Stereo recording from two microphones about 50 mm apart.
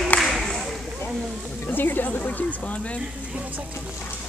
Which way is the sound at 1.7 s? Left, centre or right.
Left.